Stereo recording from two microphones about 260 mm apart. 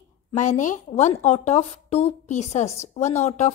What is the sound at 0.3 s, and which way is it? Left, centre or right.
A woman's voice, left.